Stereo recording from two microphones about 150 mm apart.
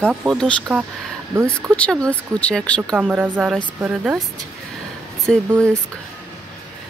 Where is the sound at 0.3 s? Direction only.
5° left (ahead or behind).